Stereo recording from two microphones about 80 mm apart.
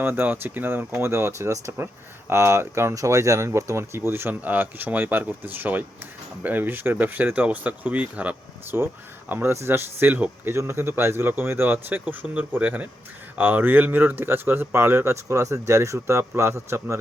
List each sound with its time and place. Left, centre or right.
0.0 s speech: right
8.7 s speech: right